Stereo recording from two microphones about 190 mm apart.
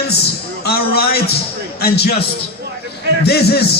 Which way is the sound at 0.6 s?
55° left (ahead or behind).